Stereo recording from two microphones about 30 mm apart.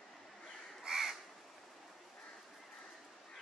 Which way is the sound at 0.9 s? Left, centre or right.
Centre.